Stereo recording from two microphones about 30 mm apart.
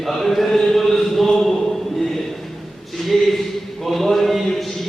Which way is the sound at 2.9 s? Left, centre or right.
Centre.